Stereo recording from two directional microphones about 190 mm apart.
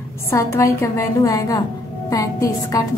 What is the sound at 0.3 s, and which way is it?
A woman's voice, 15° left (ahead or behind).